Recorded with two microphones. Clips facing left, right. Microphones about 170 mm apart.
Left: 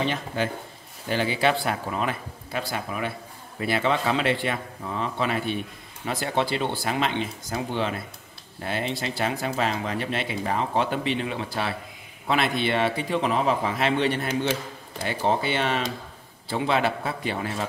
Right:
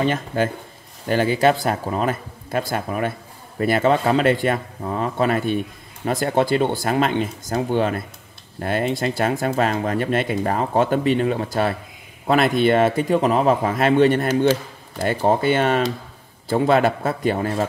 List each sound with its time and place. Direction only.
0.0 s speech: 50° right (ahead or behind)